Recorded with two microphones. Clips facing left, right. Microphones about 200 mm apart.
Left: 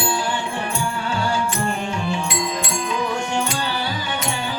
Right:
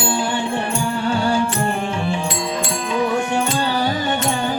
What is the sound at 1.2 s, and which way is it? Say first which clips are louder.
Music: right 4 dB; 30° right (ahead or behind).